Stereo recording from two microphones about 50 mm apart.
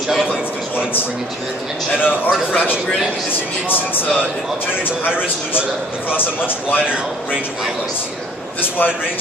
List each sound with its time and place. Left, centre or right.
2.0 s speech: left
3.6 s speech: left
6.1 s speech: left